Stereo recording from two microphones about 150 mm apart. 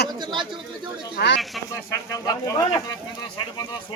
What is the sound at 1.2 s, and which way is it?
Speech, 90° left.